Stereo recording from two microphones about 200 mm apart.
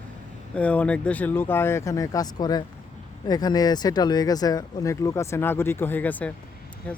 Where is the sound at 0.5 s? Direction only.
5° left (ahead or behind).